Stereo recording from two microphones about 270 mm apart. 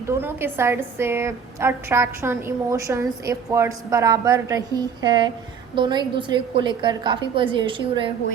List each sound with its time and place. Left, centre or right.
0.0 s a woman's voice: centre